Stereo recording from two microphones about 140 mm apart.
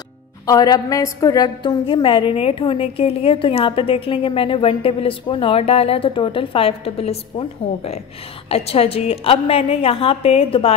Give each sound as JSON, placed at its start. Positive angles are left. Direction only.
{"t": 0.5, "sound": "a woman's voice", "side_deg": 25}